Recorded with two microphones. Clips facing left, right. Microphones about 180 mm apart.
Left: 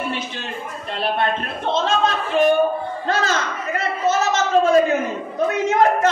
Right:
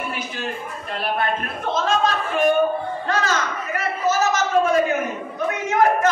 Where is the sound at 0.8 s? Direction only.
30° left (ahead or behind).